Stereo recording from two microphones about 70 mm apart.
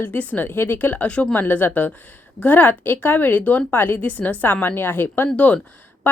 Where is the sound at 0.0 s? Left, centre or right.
Left.